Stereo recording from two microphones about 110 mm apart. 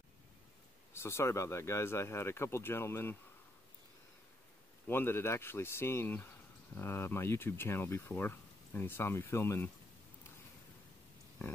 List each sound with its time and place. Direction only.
0.9 s speech: 25° left (ahead or behind)
4.8 s speech: 20° left (ahead or behind)